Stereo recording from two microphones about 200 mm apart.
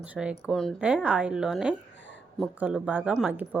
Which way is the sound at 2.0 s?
65° left (ahead or behind).